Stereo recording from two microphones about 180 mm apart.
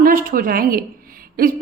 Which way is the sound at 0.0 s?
50° right (ahead or behind).